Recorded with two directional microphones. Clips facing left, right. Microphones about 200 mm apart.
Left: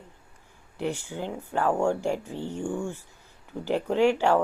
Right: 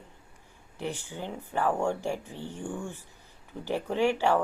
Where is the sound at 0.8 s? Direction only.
15° left (ahead or behind).